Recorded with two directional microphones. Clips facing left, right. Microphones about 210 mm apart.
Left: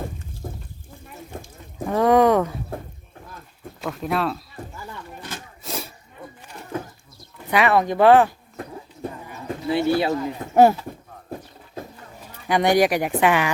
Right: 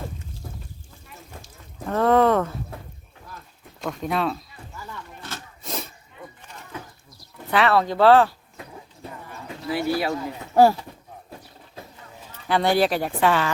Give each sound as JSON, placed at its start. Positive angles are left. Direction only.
{"t": 0.4, "sound": "a sound", "side_deg": 50}
{"t": 1.9, "sound": "speech", "side_deg": 15}
{"t": 3.8, "sound": "speech", "side_deg": 0}
{"t": 5.2, "sound": "wood", "side_deg": 10}
{"t": 7.4, "sound": "speech", "side_deg": 15}
{"t": 9.6, "sound": "speech", "side_deg": 25}
{"t": 11.8, "sound": "a sound", "side_deg": 50}
{"t": 12.2, "sound": "speech", "side_deg": 15}